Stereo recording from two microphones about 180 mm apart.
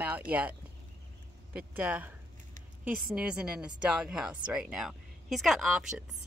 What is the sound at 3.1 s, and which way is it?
Speech, 5° right (ahead or behind).